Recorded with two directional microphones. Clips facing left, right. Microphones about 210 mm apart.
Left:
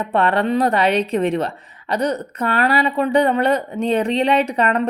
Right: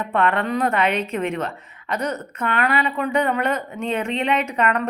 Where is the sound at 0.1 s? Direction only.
35° left (ahead or behind).